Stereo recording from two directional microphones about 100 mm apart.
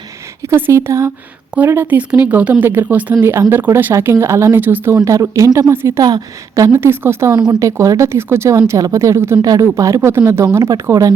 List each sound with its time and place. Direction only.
0.5 s speech: 25° right (ahead or behind)
4.9 s speech: 30° right (ahead or behind)
6.0 s speech: 40° right (ahead or behind)
6.7 s speech: 25° right (ahead or behind)
7.3 s speech: 35° right (ahead or behind)